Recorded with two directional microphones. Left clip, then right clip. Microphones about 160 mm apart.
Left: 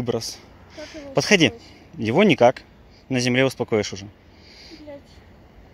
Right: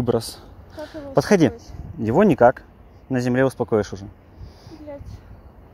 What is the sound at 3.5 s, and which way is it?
Speech, 5° right (ahead or behind).